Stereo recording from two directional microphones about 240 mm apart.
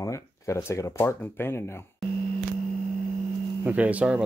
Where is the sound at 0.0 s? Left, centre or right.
Centre.